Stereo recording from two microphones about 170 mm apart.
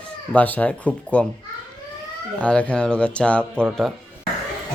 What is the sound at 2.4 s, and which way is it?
Speech, 5° left (ahead or behind).